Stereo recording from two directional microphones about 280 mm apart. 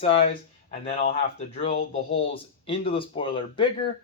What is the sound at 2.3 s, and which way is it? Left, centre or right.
Speech, centre.